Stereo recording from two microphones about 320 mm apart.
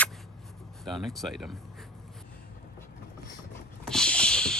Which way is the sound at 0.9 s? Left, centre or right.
Centre.